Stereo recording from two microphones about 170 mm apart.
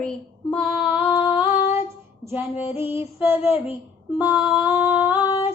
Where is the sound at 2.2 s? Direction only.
10° right (ahead or behind).